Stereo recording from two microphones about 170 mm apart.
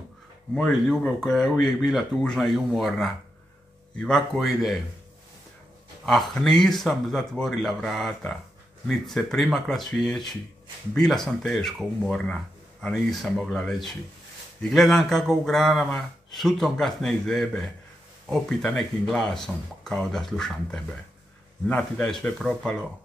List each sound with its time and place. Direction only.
0.6 s a man's voice: centre (ahead or behind)
6.0 s a man's voice: centre (ahead or behind)